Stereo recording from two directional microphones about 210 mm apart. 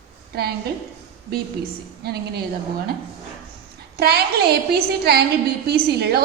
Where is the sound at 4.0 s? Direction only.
50° right (ahead or behind).